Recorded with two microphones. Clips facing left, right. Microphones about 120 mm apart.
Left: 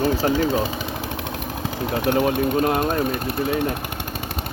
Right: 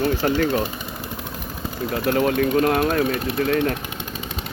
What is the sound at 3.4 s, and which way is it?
Speech, 10° left (ahead or behind).